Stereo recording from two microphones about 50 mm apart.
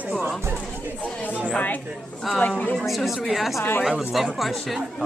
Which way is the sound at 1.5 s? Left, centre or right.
Left.